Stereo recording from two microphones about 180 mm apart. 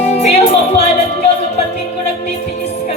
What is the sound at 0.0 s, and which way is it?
Music, 35° left (ahead or behind).